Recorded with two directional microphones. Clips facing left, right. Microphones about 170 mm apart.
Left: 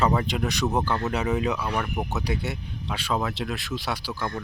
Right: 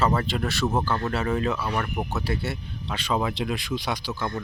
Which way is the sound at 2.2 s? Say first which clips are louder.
Even; 15° left (ahead or behind).